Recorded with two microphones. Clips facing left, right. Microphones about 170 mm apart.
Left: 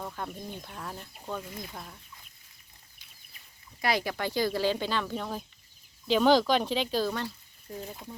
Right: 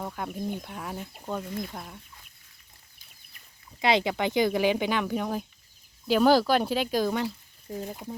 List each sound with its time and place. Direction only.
0.0 s speech: 10° right (ahead or behind)
3.8 s speech: 20° right (ahead or behind)